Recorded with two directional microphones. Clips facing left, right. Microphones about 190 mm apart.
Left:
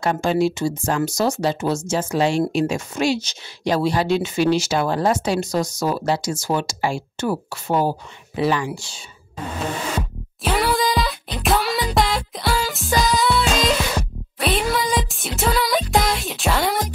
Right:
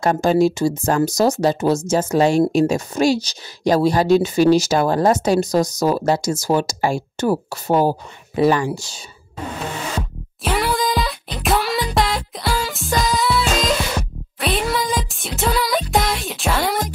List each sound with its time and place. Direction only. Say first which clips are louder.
0.0 s speech: right 4 dB; 40° right (ahead or behind)
9.9 s music: even; centre (ahead or behind)